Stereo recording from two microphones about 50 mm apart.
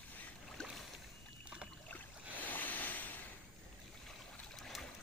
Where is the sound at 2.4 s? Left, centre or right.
Left.